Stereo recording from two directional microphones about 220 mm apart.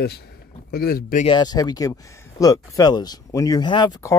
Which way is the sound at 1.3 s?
20° left (ahead or behind).